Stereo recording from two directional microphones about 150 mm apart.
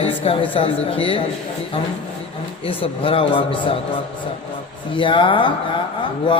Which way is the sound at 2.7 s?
35° left (ahead or behind).